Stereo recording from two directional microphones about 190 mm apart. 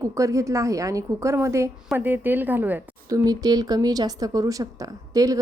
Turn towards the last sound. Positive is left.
turn(degrees=-20)  # may be behind; listen again after turning